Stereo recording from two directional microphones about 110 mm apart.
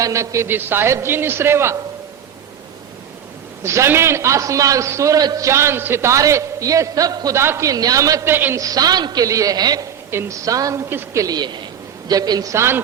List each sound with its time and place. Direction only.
0.0 s a man's voice: 30° right (ahead or behind)
3.6 s a man's voice: 25° right (ahead or behind)
7.3 s a man's voice: 25° right (ahead or behind)
8.3 s a man's voice: 20° right (ahead or behind)
8.5 s a man's voice: 35° right (ahead or behind)
10.1 s a man's voice: 25° right (ahead or behind)